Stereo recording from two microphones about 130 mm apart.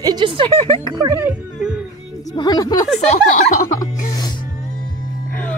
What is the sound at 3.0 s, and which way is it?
Speech, 65° left (ahead or behind).